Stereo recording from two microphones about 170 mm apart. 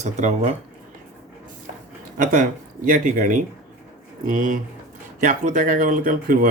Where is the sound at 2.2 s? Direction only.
50° right (ahead or behind).